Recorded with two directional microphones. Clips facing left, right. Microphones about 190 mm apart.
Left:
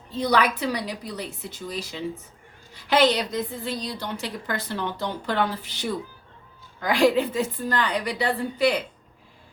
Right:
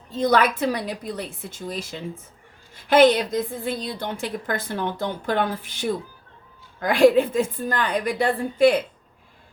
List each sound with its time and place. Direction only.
0.2 s a woman's voice: 50° right (ahead or behind)